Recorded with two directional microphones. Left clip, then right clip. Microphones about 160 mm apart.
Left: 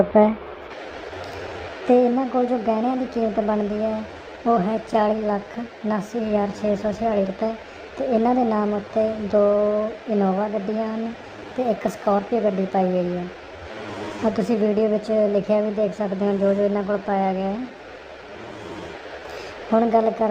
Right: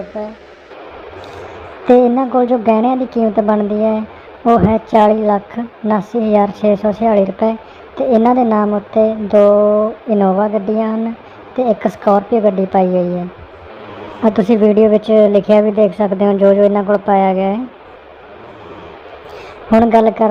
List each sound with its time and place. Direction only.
1.9 s a woman's voice: 20° right (ahead or behind)
14.3 s a woman's voice: 20° right (ahead or behind)
19.7 s a woman's voice: 20° right (ahead or behind)